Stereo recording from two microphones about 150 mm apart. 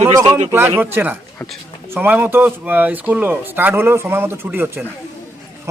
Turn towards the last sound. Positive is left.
turn(degrees=-15)  # may be behind; listen again after turning